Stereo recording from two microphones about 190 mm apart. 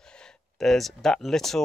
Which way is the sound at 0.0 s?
5° left (ahead or behind).